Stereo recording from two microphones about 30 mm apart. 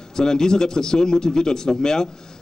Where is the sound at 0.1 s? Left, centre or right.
Left.